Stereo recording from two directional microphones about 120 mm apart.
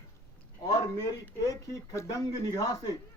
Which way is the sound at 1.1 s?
30° left (ahead or behind).